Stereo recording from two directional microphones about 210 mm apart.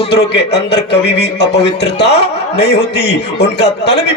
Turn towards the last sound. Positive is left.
turn(degrees=55)  # may be behind; listen again after turning